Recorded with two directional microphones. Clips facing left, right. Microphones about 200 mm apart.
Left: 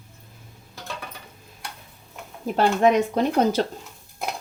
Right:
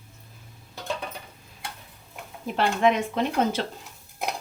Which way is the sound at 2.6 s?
40° left (ahead or behind).